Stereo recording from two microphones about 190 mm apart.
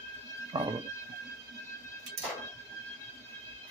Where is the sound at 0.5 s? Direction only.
25° right (ahead or behind).